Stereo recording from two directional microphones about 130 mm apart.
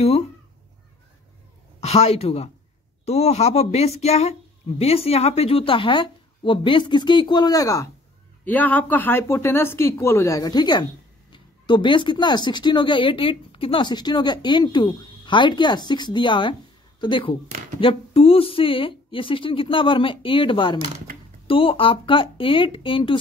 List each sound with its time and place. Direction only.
1.8 s a woman's voice: 55° left (ahead or behind); by 7.9 s 25° left (ahead or behind)
8.5 s speech: 15° left (ahead or behind); by 23.1 s 40° left (ahead or behind)